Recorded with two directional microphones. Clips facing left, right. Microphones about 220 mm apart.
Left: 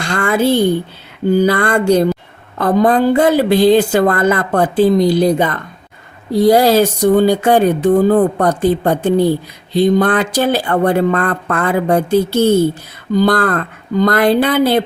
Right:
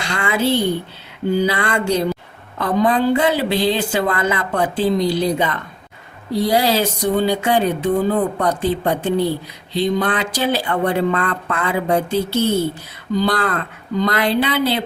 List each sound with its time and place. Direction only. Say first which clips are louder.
0.0 s a woman's voice: left 5 dB; 50° left (ahead or behind)